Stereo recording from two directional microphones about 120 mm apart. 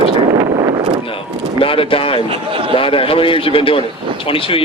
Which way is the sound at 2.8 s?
50° left (ahead or behind).